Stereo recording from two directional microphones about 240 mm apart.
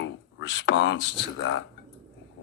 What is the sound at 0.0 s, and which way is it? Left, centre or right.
Speech, left.